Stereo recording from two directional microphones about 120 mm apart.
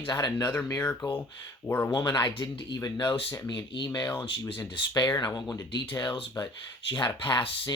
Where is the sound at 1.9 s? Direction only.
35° left (ahead or behind).